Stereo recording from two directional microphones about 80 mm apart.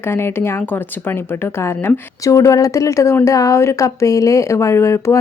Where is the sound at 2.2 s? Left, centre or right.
Left.